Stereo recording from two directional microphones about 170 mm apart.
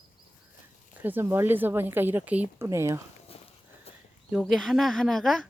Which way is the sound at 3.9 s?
35° left (ahead or behind).